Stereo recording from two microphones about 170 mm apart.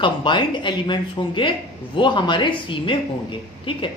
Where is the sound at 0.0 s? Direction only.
30° left (ahead or behind).